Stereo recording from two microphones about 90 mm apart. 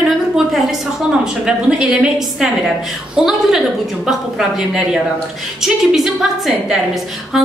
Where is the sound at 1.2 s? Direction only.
10° right (ahead or behind).